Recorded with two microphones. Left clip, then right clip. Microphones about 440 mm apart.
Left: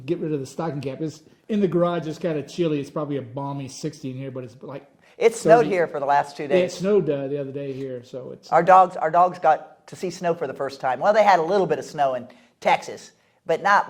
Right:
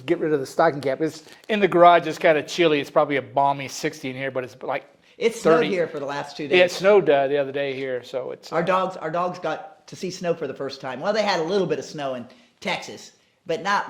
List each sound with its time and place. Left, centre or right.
0.1 s speech: right
1.0 s speech: right
5.2 s speech: left
6.6 s speech: right
8.5 s speech: left
12.6 s speech: left
13.5 s speech: left